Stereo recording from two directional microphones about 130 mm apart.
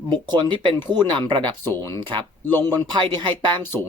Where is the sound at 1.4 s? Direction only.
15° left (ahead or behind).